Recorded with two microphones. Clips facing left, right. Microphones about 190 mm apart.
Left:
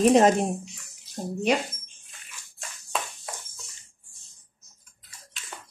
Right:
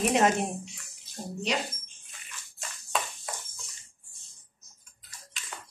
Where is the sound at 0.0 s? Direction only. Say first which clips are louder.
Left 6 dB; 35° left (ahead or behind).